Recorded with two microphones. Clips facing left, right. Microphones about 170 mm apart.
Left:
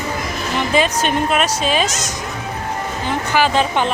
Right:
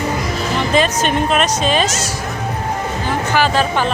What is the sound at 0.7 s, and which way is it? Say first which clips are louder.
Speech: right 1 dB; 10° left (ahead or behind).